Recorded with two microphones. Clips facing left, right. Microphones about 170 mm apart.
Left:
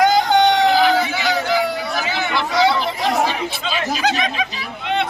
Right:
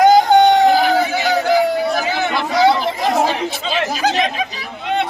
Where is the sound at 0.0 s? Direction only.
45° right (ahead or behind).